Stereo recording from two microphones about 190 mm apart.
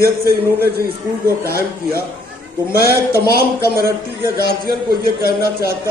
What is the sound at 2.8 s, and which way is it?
A man's voice, 55° right (ahead or behind).